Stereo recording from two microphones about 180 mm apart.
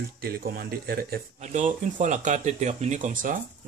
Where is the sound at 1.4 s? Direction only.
40° right (ahead or behind).